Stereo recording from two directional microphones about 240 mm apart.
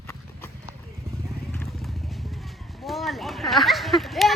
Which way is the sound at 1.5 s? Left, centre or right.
Centre.